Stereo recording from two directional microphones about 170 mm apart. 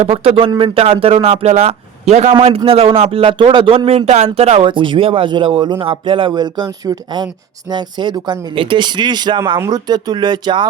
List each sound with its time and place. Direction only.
0.0 s speech: 35° right (ahead or behind)
4.6 s speech: 30° right (ahead or behind)